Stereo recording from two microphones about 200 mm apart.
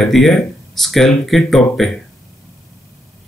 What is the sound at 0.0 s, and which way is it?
Speech, centre (ahead or behind).